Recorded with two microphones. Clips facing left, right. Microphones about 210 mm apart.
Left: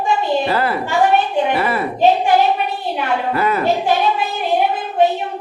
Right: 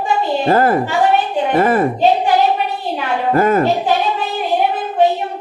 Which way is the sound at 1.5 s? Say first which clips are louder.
Right 5 dB; 45° right (ahead or behind).